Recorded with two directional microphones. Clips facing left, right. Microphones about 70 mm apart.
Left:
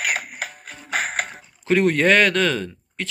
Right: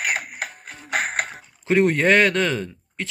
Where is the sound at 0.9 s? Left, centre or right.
Right.